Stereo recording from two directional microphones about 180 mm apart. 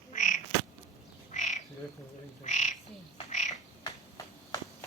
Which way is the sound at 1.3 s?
40° left (ahead or behind).